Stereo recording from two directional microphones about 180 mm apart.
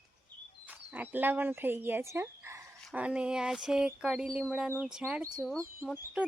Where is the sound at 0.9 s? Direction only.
10° right (ahead or behind).